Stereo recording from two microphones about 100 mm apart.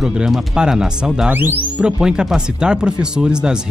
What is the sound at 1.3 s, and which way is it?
Speech, 20° right (ahead or behind).